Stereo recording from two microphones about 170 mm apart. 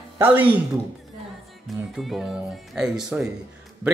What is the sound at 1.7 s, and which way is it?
Speech, centre (ahead or behind).